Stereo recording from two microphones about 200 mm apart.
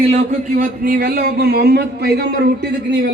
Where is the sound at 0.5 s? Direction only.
45° right (ahead or behind).